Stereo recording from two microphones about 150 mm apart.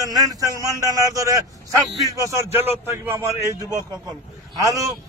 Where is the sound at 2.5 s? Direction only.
15° right (ahead or behind).